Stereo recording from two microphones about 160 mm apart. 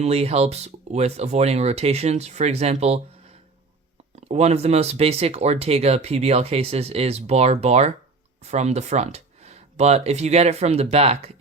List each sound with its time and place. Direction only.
0.0 s speech: 40° right (ahead or behind)
4.3 s speech: 40° right (ahead or behind)